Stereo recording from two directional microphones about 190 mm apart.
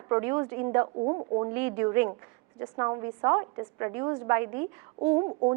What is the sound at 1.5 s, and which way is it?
A woman's voice, 10° right (ahead or behind).